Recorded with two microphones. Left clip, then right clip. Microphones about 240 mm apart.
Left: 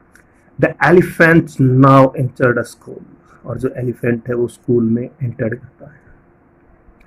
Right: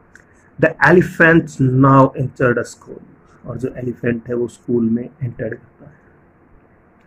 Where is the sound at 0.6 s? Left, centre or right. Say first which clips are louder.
Left 1 dB; centre.